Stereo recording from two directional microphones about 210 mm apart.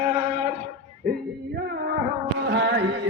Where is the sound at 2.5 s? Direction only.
55° right (ahead or behind).